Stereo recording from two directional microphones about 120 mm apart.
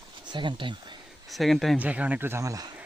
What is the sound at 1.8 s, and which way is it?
Speech, 10° right (ahead or behind).